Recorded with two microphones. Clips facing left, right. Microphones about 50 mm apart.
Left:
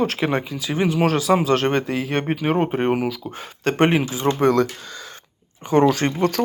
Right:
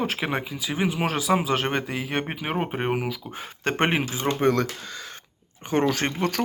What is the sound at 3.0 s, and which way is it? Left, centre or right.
Speech, centre.